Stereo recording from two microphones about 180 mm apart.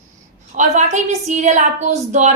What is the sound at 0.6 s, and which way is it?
A woman's voice, 40° right (ahead or behind).